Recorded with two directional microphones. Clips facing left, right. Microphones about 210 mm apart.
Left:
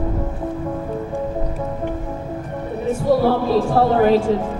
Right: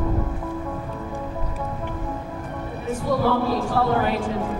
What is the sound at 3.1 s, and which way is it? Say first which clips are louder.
Music: left 7 dB; 30° left (ahead or behind).